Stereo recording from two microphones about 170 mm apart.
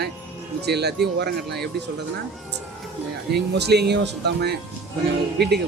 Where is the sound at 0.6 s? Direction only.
75° right (ahead or behind).